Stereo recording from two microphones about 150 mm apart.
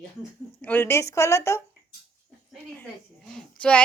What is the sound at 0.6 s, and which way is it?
A woman's voice, 10° left (ahead or behind).